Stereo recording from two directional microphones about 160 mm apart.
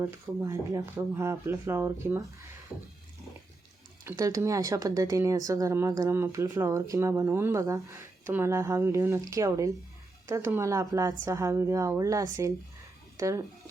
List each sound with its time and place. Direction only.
0.0 s speech: 20° right (ahead or behind)
4.0 s speech: 20° right (ahead or behind)